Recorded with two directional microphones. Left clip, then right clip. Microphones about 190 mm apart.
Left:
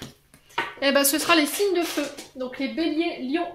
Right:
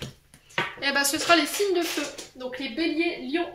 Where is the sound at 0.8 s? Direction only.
60° left (ahead or behind).